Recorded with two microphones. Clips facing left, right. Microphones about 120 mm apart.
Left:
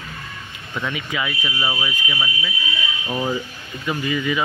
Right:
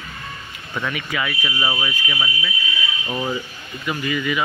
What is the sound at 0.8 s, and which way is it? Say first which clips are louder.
Speech: even; 20° left (ahead or behind).